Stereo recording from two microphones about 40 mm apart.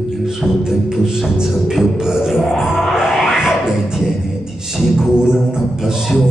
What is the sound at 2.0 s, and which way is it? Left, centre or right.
Music, centre.